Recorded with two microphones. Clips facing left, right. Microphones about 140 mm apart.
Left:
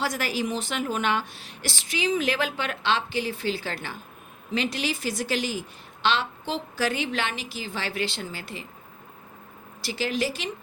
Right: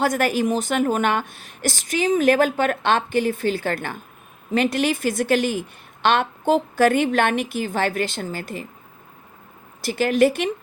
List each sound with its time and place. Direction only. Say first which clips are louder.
0.0 s a woman's voice: right 8 dB; 55° right (ahead or behind)
9.8 s a woman's voice: right 10 dB; 55° right (ahead or behind)